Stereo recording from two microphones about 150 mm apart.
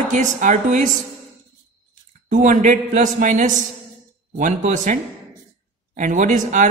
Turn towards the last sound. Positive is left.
turn(degrees=-55)  # may be behind; listen again after turning